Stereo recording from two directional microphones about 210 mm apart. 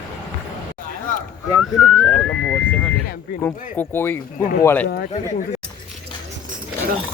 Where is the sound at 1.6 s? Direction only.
Centre (ahead or behind).